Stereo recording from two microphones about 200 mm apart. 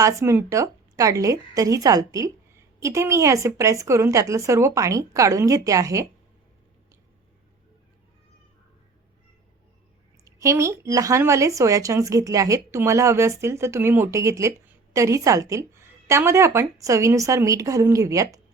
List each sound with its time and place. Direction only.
0.0 s speech: 15° right (ahead or behind)
10.2 s speech: 15° right (ahead or behind)